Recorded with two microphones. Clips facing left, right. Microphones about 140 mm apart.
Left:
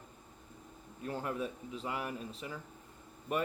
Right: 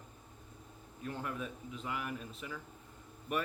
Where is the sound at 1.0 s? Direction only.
30° left (ahead or behind).